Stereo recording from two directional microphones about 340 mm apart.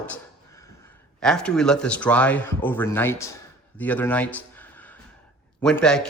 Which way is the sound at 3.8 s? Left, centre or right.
Centre.